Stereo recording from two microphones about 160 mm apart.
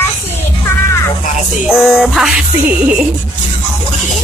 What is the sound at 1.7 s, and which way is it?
Music, centre (ahead or behind).